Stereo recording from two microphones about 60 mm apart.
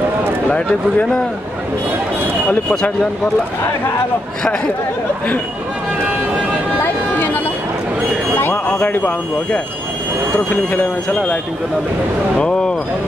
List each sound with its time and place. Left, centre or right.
0.5 s speech: left
6.8 s a sound: left
10.5 s speech: left
12.4 s speech: centre